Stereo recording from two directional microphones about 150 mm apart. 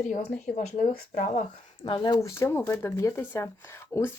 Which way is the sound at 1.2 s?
50° left (ahead or behind).